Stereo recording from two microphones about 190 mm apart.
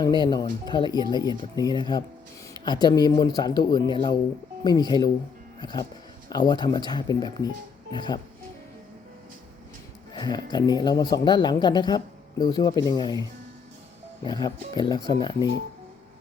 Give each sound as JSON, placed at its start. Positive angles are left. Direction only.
{"t": 0.0, "sound": "speech", "side_deg": 25}
{"t": 5.5, "sound": "music", "side_deg": 20}
{"t": 6.2, "sound": "speech", "side_deg": 20}
{"t": 10.2, "sound": "speech", "side_deg": 20}
{"t": 14.3, "sound": "speech", "side_deg": 25}